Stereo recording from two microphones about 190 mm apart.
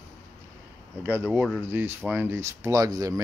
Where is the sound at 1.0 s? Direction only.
10° right (ahead or behind).